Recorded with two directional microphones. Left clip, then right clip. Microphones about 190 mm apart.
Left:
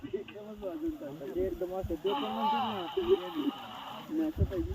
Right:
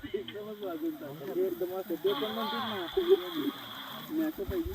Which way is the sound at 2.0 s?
20° right (ahead or behind).